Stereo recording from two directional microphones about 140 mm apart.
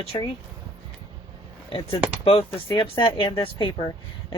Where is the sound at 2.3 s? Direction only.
40° left (ahead or behind).